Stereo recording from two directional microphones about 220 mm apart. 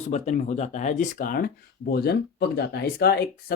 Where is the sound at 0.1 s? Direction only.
30° left (ahead or behind).